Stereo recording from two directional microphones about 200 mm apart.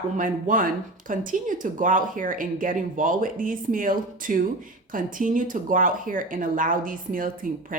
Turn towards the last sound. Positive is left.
turn(degrees=-45)  # may be behind; listen again after turning